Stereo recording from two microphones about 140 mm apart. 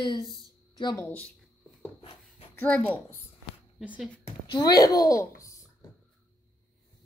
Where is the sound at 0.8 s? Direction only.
25° left (ahead or behind).